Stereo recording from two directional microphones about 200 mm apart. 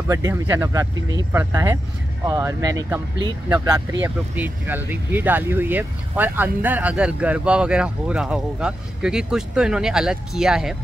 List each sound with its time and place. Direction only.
0.1 s speech: 15° right (ahead or behind)